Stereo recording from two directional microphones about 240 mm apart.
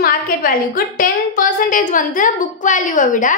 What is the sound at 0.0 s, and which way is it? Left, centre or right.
A woman's voice, left.